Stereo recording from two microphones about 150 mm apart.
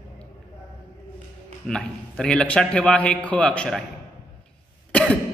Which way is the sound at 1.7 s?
5° left (ahead or behind).